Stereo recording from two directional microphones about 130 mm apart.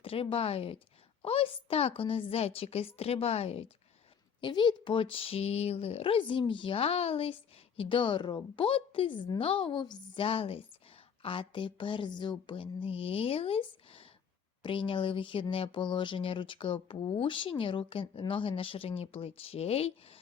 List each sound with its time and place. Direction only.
0.0 s speech: 45° left (ahead or behind)
4.4 s speech: 35° left (ahead or behind)